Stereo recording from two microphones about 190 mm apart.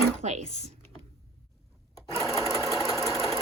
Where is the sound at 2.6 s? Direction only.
Centre (ahead or behind).